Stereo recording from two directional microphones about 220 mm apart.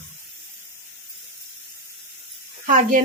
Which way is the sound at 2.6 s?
35° right (ahead or behind).